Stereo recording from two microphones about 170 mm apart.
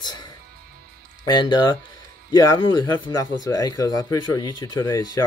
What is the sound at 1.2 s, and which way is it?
Speech, 25° left (ahead or behind).